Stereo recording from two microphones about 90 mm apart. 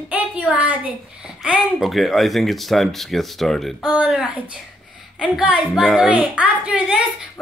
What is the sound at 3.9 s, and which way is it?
Speech, 10° right (ahead or behind).